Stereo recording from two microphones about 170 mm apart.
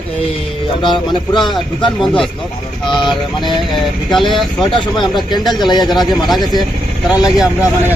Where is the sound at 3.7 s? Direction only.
Centre (ahead or behind).